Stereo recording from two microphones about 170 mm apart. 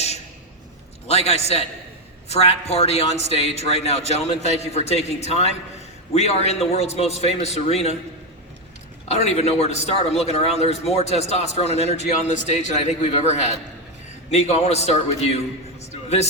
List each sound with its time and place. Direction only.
1.0 s a man's voice: 40° left (ahead or behind)
9.0 s a man's voice: 40° left (ahead or behind)